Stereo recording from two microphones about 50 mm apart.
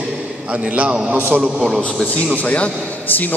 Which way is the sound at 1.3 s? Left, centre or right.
Centre.